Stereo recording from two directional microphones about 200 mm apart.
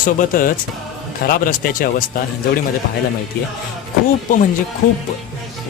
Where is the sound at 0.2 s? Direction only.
45° left (ahead or behind).